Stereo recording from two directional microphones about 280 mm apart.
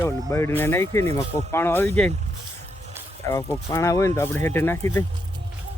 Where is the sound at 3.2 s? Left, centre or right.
Centre.